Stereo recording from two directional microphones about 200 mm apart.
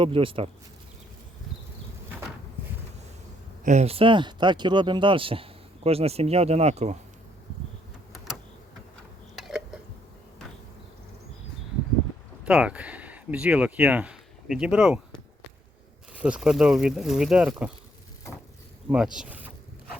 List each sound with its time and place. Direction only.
0.0 s speech: 25° right (ahead or behind)
3.6 s speech: 35° right (ahead or behind)
8.1 s a sound: centre (ahead or behind)
12.5 s speech: 5° right (ahead or behind)
18.9 s speech: 5° right (ahead or behind)